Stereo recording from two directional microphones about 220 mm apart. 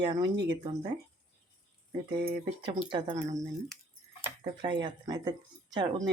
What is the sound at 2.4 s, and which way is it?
Speech, 20° right (ahead or behind).